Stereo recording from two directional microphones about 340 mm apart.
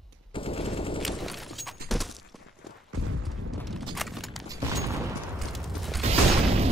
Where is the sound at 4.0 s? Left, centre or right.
Centre.